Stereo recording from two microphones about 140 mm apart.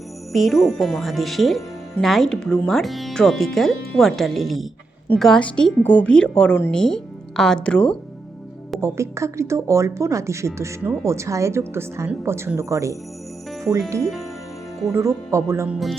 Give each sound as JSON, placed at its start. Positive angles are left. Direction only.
{"t": 0.3, "sound": "a woman's voice", "side_deg": 0}
{"t": 8.8, "sound": "speech", "side_deg": -20}
{"t": 14.9, "sound": "speech", "side_deg": -20}
{"t": 15.7, "sound": "speech", "side_deg": 0}